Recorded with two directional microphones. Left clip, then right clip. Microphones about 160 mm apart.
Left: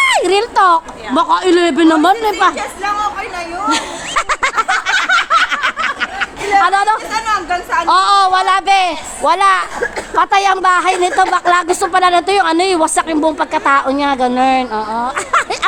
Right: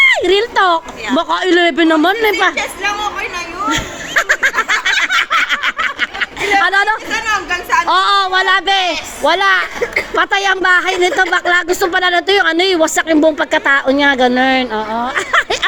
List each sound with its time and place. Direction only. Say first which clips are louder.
0.0 s a woman's voice: right 1 dB; centre (ahead or behind)
3.7 s snicker: left 2 dB; 25° left (ahead or behind)
5.5 s a sound: even; 15° right (ahead or behind)
6.0 s a woman's voice: right 1 dB; 5° right (ahead or behind)
10.2 s a woman's voice: left 3 dB; 5° right (ahead or behind)